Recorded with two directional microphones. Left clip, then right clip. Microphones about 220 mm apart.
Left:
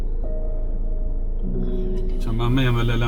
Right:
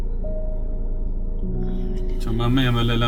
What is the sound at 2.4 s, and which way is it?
Speech, 30° right (ahead or behind).